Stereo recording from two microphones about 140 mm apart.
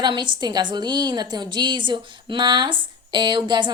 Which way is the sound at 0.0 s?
35° right (ahead or behind).